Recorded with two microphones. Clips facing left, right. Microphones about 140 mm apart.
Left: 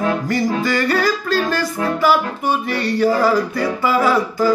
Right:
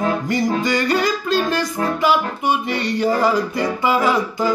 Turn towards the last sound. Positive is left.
turn(degrees=-20)  # may be behind; listen again after turning